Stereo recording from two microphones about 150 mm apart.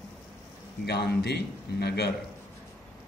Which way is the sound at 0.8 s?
90° left.